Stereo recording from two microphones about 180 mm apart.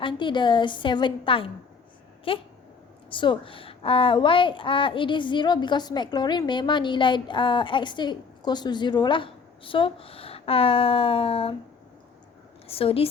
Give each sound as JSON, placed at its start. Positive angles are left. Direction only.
{"t": 0.0, "sound": "a child's voice", "side_deg": 25}
{"t": 12.6, "sound": "a woman's voice", "side_deg": 30}